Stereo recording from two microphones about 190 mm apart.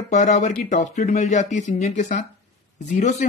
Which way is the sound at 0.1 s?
40° left (ahead or behind).